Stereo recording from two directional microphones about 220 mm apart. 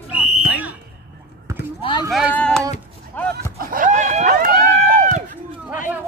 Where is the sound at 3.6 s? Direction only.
40° right (ahead or behind).